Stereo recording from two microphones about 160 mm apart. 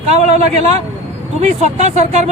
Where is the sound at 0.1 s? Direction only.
40° right (ahead or behind).